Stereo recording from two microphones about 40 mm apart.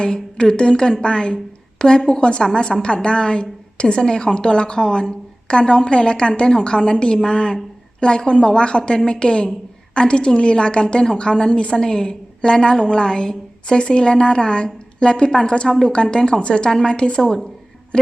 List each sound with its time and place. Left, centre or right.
0.0 s a woman's voice: left